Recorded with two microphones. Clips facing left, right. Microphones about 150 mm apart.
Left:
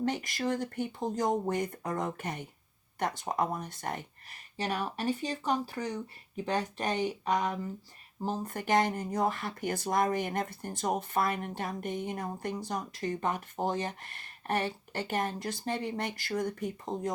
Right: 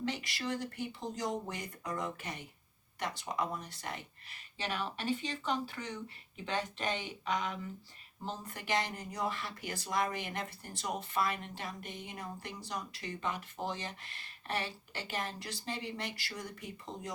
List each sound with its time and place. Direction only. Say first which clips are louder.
0.0 s speech: left 6 dB; 50° left (ahead or behind)